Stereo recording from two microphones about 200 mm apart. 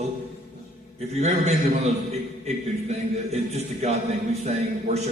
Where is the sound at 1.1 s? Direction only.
35° right (ahead or behind).